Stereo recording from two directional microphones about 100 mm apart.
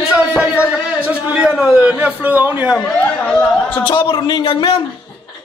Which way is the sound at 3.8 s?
55° left (ahead or behind).